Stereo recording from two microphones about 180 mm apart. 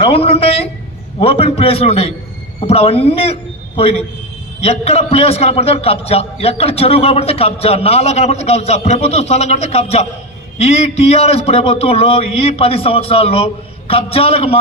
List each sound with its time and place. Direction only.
0.0 s a man's voice: 30° left (ahead or behind)